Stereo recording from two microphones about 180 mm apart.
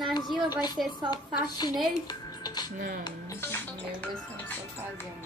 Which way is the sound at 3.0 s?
15° left (ahead or behind).